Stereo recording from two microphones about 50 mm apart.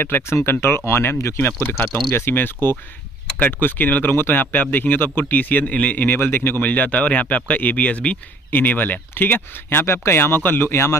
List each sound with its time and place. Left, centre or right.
0.0 s speech: left
2.3 s speech: left
6.6 s speech: left
8.5 s speech: left